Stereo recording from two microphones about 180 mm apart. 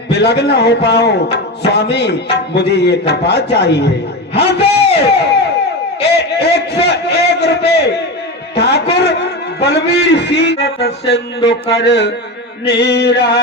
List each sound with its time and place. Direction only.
0.1 s speech: 70° left (ahead or behind)
4.4 s a sound: 70° left (ahead or behind)
8.5 s a man's voice: 65° left (ahead or behind)